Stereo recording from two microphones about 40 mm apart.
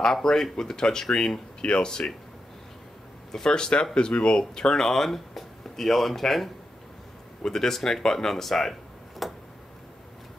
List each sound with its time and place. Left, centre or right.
0.0 s speech: centre
3.3 s speech: centre
4.4 s speech: centre
9.2 s a sound: centre